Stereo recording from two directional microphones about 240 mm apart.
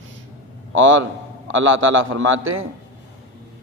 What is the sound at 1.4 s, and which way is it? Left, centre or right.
A man's voice, right.